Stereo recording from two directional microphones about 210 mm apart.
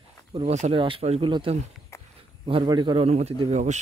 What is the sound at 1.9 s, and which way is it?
Walk, 15° left (ahead or behind).